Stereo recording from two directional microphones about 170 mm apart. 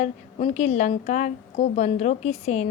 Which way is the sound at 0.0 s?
40° left (ahead or behind).